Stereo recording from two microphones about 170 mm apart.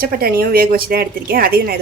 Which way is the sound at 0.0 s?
60° right (ahead or behind).